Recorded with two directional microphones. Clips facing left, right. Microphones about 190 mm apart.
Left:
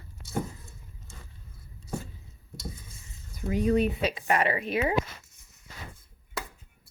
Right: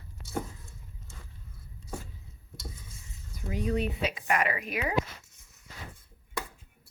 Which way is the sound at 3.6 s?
55° left (ahead or behind).